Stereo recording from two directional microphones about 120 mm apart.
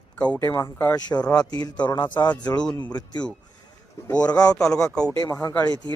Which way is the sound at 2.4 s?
10° left (ahead or behind).